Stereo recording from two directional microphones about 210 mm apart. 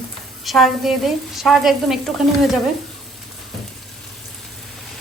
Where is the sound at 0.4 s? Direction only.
Centre (ahead or behind).